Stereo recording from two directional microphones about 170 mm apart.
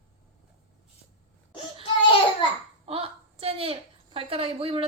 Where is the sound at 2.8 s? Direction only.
35° right (ahead or behind).